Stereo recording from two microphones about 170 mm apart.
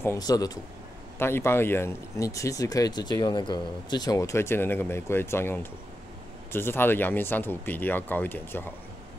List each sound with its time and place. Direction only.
0.0 s speech: 20° left (ahead or behind)